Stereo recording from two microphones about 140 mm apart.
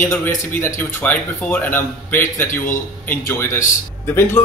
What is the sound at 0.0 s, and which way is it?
Speech, 15° left (ahead or behind).